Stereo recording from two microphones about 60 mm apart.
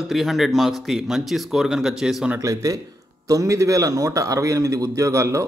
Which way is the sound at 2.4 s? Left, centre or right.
Right.